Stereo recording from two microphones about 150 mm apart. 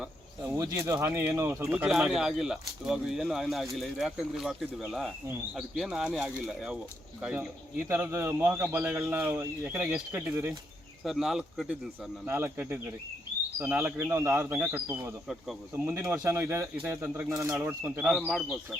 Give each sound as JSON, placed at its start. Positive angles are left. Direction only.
{"t": 0.4, "sound": "a sound", "side_deg": -20}
{"t": 0.9, "sound": "a man's voice", "side_deg": -15}
{"t": 1.7, "sound": "a man's voice", "side_deg": -5}
{"t": 11.0, "sound": "speech", "side_deg": 0}
{"t": 12.2, "sound": "a man's voice", "side_deg": -15}
{"t": 15.3, "sound": "speech", "side_deg": -5}
{"t": 15.9, "sound": "a man's voice", "side_deg": -20}
{"t": 18.0, "sound": "speech", "side_deg": -5}